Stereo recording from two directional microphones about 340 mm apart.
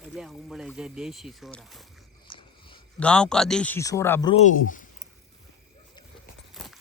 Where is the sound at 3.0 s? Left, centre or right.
Centre; by 4.9 s left.